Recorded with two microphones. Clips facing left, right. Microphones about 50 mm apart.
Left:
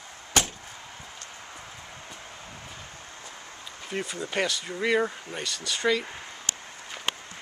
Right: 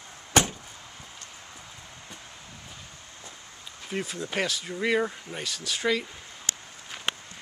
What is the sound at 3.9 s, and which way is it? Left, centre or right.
Speech, centre.